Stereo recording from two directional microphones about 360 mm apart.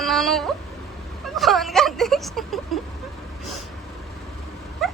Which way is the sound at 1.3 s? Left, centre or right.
Centre.